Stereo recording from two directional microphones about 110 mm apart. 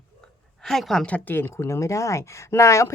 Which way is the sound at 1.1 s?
15° left (ahead or behind).